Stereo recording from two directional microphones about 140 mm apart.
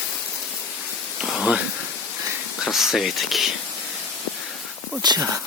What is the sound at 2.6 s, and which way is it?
Speech, centre (ahead or behind).